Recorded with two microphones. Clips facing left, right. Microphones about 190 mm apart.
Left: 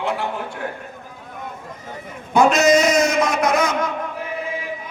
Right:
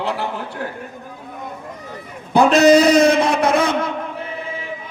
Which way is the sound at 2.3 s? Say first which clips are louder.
Right 3 dB; 35° right (ahead or behind).